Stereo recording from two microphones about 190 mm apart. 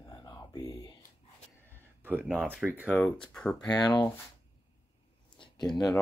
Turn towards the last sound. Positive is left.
turn(degrees=20)  # may be behind; listen again after turning